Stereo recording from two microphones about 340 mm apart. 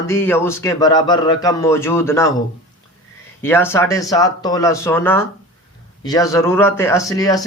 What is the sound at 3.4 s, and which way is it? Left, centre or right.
Speech, centre.